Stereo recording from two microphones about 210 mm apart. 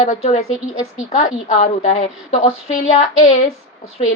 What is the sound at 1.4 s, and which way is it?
A woman's voice, 35° left (ahead or behind).